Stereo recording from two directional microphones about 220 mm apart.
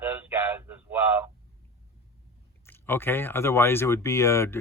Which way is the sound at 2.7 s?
10° left (ahead or behind).